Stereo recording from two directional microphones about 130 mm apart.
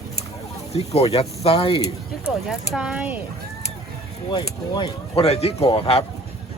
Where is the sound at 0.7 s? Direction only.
55° left (ahead or behind).